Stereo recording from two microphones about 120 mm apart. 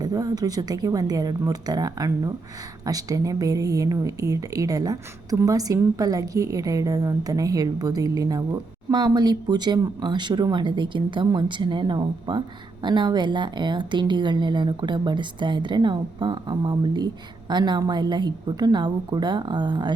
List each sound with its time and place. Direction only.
0.0 s a woman's voice: 30° right (ahead or behind)